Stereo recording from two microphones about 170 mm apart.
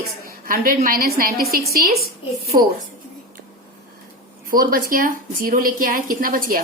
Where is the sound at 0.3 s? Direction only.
55° right (ahead or behind).